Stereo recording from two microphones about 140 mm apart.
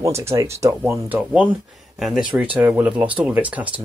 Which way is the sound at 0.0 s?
20° right (ahead or behind).